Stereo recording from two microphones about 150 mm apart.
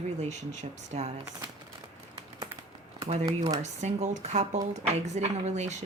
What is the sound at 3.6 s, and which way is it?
Speech, 50° right (ahead or behind).